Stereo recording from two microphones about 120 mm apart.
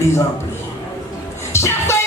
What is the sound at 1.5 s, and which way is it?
Music, 25° left (ahead or behind).